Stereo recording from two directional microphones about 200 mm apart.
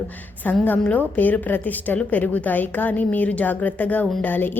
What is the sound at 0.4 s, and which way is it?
A woman's voice, 10° left (ahead or behind).